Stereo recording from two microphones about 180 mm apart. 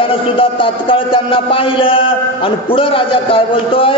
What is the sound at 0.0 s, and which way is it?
A man's voice, 30° left (ahead or behind).